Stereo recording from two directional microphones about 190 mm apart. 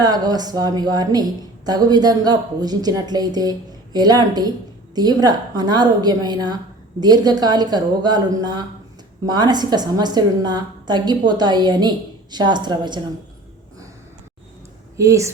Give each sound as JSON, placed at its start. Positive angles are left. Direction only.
{"t": 0.0, "sound": "speech", "side_deg": -20}
{"t": 14.9, "sound": "speech", "side_deg": -15}